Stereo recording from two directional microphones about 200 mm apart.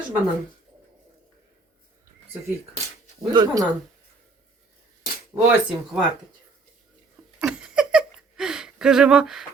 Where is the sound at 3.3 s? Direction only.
20° right (ahead or behind).